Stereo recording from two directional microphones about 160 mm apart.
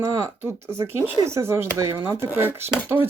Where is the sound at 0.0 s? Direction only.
15° right (ahead or behind).